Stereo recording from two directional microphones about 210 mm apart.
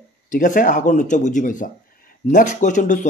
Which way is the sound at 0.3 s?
35° left (ahead or behind).